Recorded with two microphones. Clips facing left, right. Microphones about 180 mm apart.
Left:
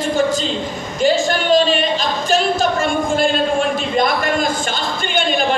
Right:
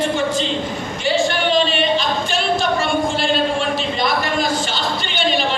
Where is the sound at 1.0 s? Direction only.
40° left (ahead or behind).